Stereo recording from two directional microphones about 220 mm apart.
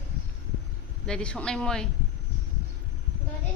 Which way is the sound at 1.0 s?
5° left (ahead or behind).